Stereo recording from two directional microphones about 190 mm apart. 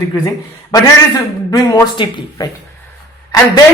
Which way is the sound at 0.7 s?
20° left (ahead or behind).